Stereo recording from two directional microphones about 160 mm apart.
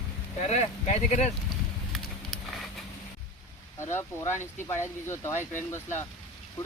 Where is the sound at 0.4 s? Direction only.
45° left (ahead or behind).